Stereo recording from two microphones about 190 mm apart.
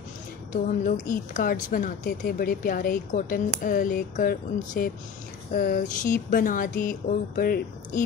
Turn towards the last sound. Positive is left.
turn(degrees=50)  # may be behind; listen again after turning